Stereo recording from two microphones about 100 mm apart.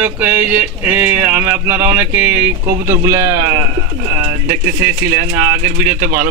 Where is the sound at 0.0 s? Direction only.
20° right (ahead or behind).